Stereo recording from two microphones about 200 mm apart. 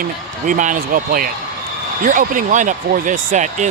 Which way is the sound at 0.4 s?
40° right (ahead or behind).